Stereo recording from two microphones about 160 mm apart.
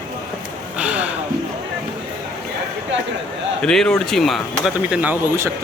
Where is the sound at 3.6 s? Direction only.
5° left (ahead or behind).